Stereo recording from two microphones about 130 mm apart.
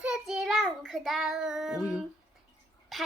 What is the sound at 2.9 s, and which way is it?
Speech, centre (ahead or behind).